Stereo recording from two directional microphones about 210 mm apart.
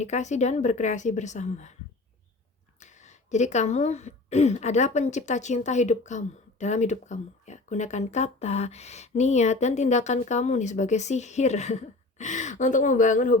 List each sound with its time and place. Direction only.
0.0 s speech: 35° left (ahead or behind)
2.8 s speech: 35° left (ahead or behind)